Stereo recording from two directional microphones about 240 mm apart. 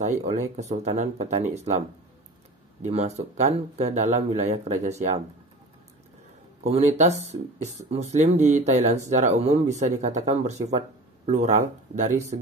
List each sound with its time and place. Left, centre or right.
0.2 s speech: right
2.8 s speech: right
6.7 s speech: right